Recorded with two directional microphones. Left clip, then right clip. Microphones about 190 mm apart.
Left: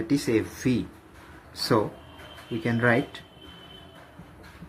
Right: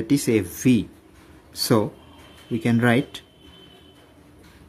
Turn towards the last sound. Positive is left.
turn(degrees=-90)